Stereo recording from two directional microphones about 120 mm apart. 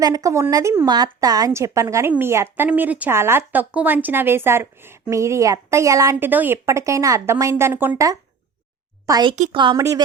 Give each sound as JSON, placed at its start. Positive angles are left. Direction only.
{"t": 0.0, "sound": "speech", "side_deg": -30}
{"t": 0.9, "sound": "speech", "side_deg": -35}
{"t": 9.0, "sound": "speech", "side_deg": -35}
{"t": 9.7, "sound": "speech", "side_deg": -30}